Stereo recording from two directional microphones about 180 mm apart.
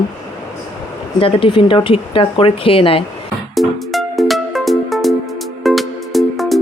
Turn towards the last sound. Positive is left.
turn(degrees=0)  # may be behind; listen again after turning